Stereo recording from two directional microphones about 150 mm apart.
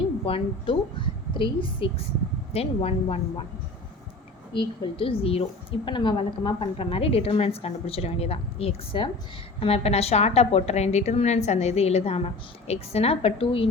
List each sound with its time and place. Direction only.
0.3 s a woman's voice: 35° left (ahead or behind)
4.5 s a woman's voice: 35° left (ahead or behind)